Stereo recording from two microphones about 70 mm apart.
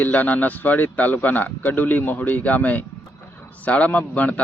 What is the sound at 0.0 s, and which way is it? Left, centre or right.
Speech, left.